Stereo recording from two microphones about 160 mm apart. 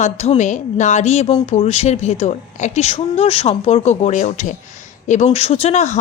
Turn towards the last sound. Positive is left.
turn(degrees=45)  # may be behind; listen again after turning